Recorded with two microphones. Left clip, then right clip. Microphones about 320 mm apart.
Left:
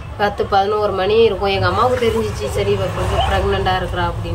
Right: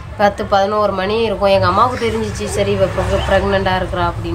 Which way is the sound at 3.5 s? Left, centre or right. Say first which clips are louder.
Right 2 dB; centre.